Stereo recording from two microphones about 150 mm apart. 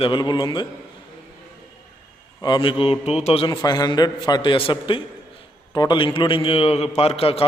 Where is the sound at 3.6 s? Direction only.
25° left (ahead or behind).